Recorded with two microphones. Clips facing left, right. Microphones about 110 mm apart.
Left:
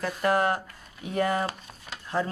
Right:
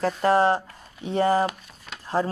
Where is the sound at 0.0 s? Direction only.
30° right (ahead or behind).